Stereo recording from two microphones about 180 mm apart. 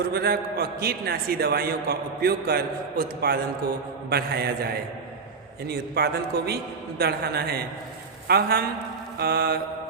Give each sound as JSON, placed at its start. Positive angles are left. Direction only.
{"t": 0.0, "sound": "a man's voice", "side_deg": -60}
{"t": 5.6, "sound": "a man's voice", "side_deg": -60}